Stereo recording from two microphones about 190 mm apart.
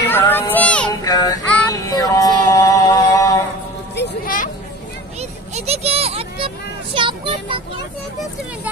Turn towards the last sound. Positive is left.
turn(degrees=-25)  # may be behind; listen again after turning